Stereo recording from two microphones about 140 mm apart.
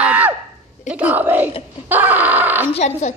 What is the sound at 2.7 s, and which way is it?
Speech, 55° left (ahead or behind).